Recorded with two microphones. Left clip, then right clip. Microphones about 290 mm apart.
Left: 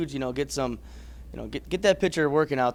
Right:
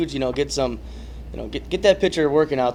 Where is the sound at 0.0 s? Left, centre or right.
Left.